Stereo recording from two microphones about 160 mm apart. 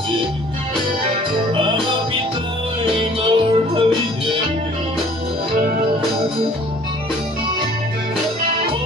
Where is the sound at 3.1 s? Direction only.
35° right (ahead or behind).